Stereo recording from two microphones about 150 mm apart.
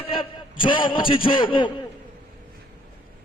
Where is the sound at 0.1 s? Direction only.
35° left (ahead or behind).